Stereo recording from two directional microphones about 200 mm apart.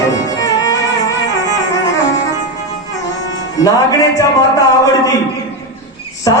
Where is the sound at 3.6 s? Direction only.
15° left (ahead or behind).